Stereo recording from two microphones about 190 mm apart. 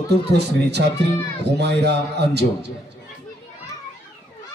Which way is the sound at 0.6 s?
60° right (ahead or behind).